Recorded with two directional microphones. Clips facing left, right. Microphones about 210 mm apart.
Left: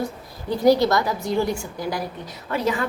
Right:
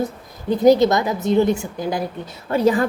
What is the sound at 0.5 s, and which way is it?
A woman's voice, 20° right (ahead or behind).